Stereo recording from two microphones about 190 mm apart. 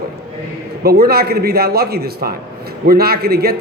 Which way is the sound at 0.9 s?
55° right (ahead or behind).